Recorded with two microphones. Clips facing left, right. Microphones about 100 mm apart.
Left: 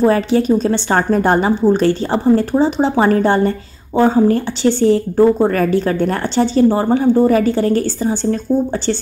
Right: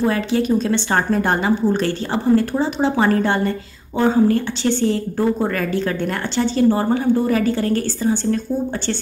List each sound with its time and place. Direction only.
0.0 s a woman's voice: 35° left (ahead or behind)